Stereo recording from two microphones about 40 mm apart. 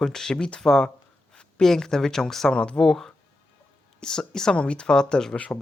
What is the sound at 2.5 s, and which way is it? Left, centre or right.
Speech, left.